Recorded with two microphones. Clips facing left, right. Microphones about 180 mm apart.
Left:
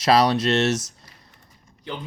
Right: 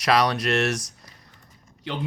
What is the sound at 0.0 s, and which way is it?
Speech, 30° left (ahead or behind).